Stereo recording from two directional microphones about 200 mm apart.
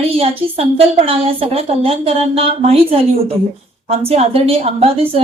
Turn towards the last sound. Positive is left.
turn(degrees=-30)  # may be behind; listen again after turning